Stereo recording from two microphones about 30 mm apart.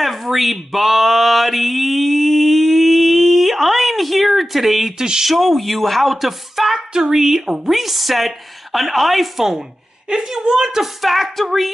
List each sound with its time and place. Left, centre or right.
0.0 s male singing: centre
4.9 s a woman's voice: right
5.2 s speech: centre
10.4 s a woman's voice: right
10.8 s speech: centre